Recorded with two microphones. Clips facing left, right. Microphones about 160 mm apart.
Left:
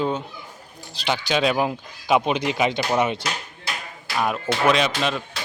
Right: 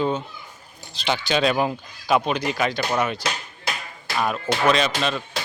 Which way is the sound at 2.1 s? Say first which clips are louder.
Left 1 dB; 15° left (ahead or behind).